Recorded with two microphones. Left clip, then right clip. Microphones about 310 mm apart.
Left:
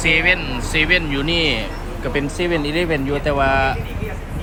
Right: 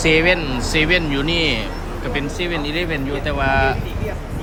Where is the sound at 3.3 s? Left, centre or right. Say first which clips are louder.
Left 1 dB; centre.